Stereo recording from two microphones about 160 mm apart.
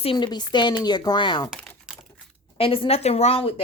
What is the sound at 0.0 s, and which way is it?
Speech, 30° left (ahead or behind).